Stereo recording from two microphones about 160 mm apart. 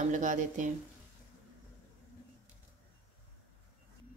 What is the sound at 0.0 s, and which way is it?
Speech, 50° right (ahead or behind).